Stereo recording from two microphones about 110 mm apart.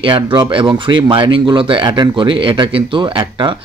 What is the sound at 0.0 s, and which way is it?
Speech, 45° right (ahead or behind).